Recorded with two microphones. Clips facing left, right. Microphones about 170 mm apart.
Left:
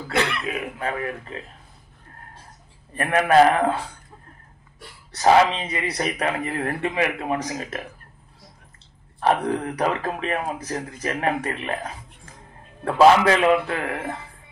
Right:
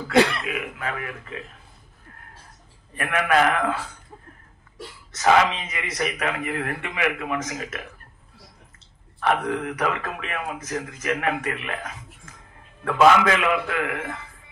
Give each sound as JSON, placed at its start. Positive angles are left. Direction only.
{"t": 0.1, "sound": "speech", "side_deg": -35}
{"t": 0.7, "sound": "speech", "side_deg": 35}
{"t": 3.0, "sound": "speech", "side_deg": 35}
{"t": 5.1, "sound": "speech", "side_deg": 35}
{"t": 9.2, "sound": "speech", "side_deg": 35}